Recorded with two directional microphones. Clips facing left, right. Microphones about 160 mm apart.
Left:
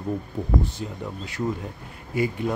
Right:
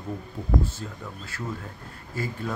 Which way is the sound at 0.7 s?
20° left (ahead or behind).